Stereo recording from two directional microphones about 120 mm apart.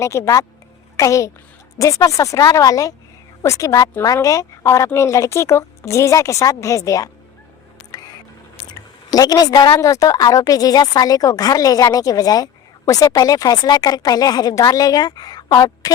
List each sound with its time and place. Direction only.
0.0 s a woman's voice: 25° left (ahead or behind)
7.9 s single-lens reflex camera: 35° left (ahead or behind)
9.0 s a woman's voice: 30° left (ahead or behind)